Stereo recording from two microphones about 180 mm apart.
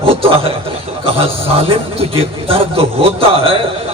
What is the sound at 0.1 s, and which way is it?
A man's voice, 30° right (ahead or behind).